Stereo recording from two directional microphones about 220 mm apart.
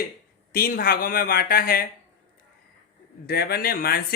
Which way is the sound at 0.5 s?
40° left (ahead or behind).